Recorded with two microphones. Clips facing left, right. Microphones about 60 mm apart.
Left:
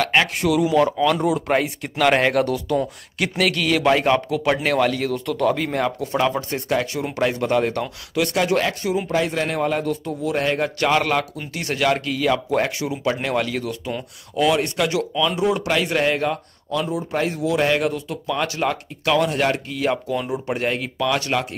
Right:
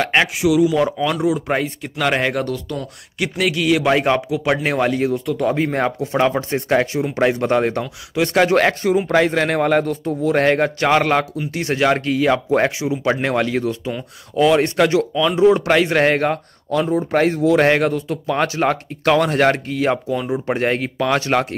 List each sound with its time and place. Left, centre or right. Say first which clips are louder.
0.0 s speech: right 2 dB; centre
0.3 s speech: right 3 dB; centre; by 8.4 s right
8.5 s a man's voice: right 6 dB; right